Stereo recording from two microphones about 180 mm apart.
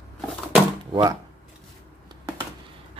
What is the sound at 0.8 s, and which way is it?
Speech, 20° right (ahead or behind).